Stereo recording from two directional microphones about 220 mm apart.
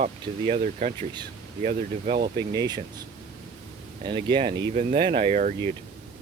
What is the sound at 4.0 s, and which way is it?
Speech, 20° right (ahead or behind).